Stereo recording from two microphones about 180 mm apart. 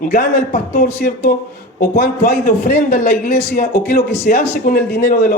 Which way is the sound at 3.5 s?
45° left (ahead or behind).